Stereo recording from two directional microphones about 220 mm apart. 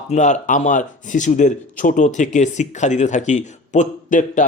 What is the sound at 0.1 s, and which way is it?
Speech, 30° left (ahead or behind).